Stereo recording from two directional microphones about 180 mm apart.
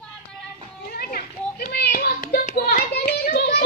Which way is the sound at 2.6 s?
60° left (ahead or behind).